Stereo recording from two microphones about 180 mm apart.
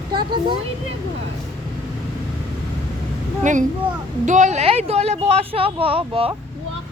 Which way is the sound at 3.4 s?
45° right (ahead or behind).